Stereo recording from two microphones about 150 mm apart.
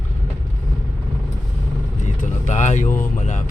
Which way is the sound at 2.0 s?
50° left (ahead or behind).